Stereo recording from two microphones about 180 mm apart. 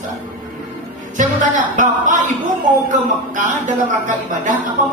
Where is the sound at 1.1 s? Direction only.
45° right (ahead or behind).